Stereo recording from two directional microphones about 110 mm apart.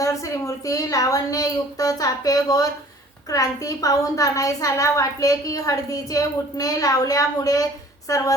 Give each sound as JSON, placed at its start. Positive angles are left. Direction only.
{"t": 0.0, "sound": "a woman's voice", "side_deg": 30}